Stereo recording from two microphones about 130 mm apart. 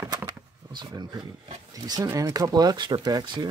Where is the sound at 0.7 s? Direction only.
30° right (ahead or behind).